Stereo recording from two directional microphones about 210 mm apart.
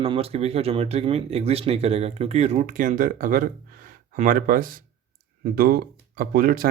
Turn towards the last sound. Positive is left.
turn(degrees=-40)  # may be behind; listen again after turning